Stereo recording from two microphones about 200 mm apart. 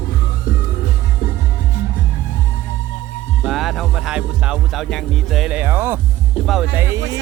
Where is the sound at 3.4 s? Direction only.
Centre (ahead or behind).